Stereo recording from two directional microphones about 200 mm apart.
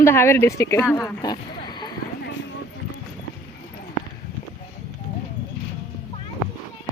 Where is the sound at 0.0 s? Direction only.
15° left (ahead or behind).